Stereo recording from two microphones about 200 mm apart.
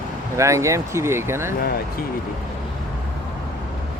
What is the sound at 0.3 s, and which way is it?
Speech, 15° right (ahead or behind).